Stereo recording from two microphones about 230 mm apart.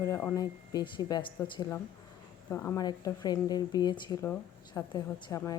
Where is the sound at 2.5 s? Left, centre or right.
Centre.